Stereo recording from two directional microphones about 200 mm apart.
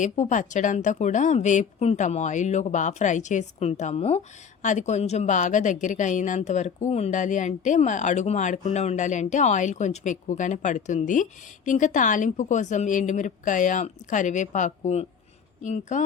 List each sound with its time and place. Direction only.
0.0 s a woman's voice: 40° left (ahead or behind)